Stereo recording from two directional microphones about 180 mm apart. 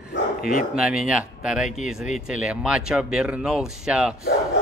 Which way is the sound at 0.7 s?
5° right (ahead or behind).